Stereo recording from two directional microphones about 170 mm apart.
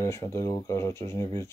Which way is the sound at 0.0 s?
15° left (ahead or behind).